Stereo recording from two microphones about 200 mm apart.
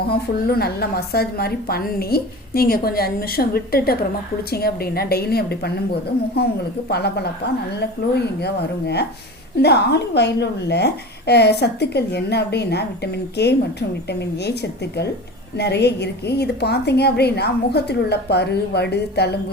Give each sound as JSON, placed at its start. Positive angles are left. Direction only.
{"t": 0.1, "sound": "a woman's voice", "side_deg": 50}